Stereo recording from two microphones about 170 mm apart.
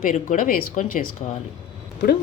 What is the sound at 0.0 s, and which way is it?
Speech, 50° left (ahead or behind).